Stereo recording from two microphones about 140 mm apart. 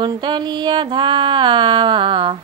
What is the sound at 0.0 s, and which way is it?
Mantra, 35° right (ahead or behind).